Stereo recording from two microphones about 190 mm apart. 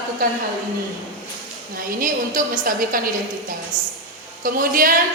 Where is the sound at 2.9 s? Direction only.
50° right (ahead or behind).